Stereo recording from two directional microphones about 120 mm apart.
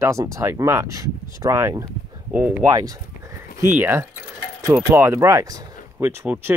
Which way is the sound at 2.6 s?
30° right (ahead or behind).